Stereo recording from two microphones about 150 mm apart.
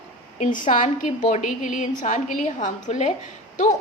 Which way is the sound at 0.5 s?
60° left (ahead or behind).